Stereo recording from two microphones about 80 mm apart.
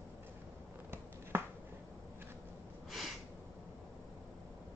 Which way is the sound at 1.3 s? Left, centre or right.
Right.